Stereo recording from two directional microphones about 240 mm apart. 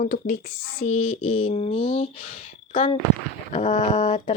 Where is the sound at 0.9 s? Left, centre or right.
Left.